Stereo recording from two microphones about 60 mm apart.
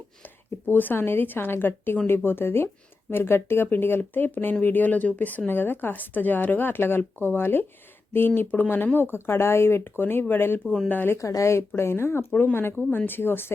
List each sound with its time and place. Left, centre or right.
0.7 s speech: left
11.2 s speech: left
11.8 s speech: left
12.3 s speech: left
13.1 s speech: left